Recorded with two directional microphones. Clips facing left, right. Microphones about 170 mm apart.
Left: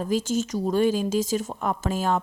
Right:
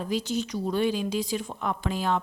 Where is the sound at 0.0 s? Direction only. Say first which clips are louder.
Left 4 dB; 45° left (ahead or behind).